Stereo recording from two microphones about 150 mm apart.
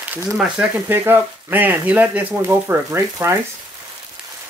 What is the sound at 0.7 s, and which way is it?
Speech, 15° right (ahead or behind).